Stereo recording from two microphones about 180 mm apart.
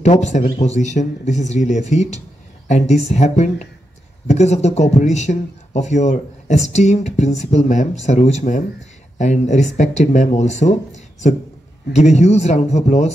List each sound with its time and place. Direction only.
0.0 s speech: 40° left (ahead or behind)